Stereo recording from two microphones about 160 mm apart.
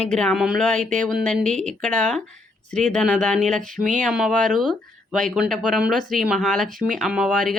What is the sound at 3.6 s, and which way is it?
Speech, 55° right (ahead or behind).